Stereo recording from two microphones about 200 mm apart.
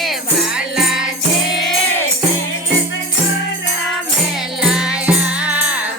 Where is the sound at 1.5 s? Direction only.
Centre (ahead or behind).